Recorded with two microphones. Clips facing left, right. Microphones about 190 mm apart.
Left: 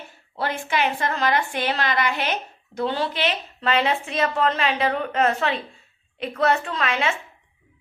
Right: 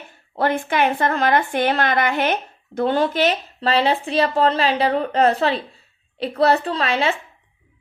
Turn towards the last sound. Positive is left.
turn(degrees=-35)  # may be behind; listen again after turning